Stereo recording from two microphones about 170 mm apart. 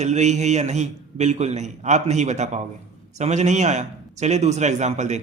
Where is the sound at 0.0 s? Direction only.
45° right (ahead or behind).